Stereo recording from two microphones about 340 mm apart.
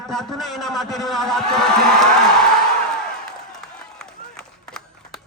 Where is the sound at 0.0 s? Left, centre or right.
Centre.